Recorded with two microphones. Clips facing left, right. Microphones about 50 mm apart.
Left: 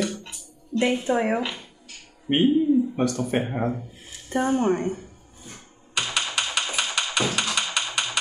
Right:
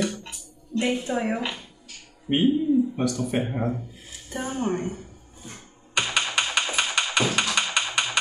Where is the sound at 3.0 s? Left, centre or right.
Left.